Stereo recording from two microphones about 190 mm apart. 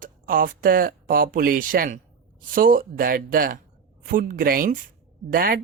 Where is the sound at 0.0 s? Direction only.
45° right (ahead or behind).